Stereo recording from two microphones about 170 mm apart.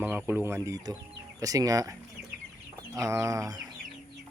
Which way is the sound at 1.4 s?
20° right (ahead or behind).